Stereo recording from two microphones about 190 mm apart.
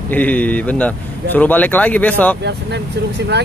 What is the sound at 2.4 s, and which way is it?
Speech, 60° right (ahead or behind).